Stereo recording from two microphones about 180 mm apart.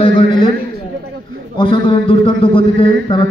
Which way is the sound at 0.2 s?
25° left (ahead or behind).